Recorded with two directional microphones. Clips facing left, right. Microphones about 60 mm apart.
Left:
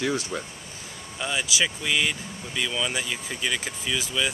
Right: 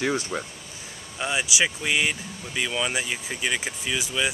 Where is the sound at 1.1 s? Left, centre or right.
Centre.